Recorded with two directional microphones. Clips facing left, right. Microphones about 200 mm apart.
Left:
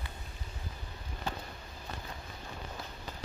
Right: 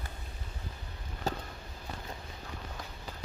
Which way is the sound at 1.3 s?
40° right (ahead or behind).